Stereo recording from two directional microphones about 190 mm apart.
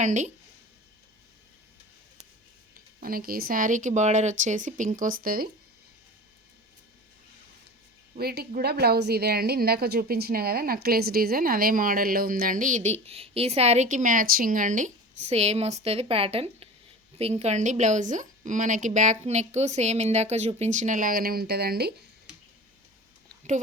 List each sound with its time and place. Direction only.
0.0 s a woman's voice: 40° right (ahead or behind)
3.0 s a woman's voice: 50° right (ahead or behind)
8.1 s a woman's voice: 55° right (ahead or behind)